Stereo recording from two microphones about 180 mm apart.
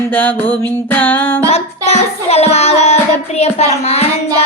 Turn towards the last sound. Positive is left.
turn(degrees=35)  # may be behind; listen again after turning